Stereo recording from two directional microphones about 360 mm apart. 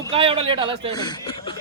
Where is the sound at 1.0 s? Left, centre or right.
Centre.